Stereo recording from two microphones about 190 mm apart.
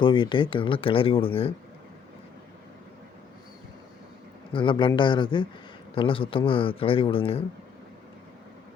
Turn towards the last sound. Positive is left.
turn(degrees=30)  # may be behind; listen again after turning